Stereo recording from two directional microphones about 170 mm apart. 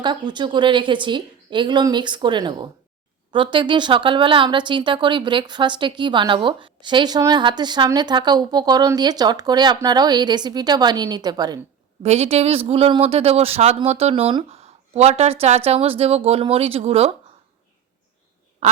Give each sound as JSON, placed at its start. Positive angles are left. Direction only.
{"t": 0.0, "sound": "speech", "side_deg": -25}
{"t": 12.0, "sound": "speech", "side_deg": -40}
{"t": 18.6, "sound": "quack", "side_deg": -40}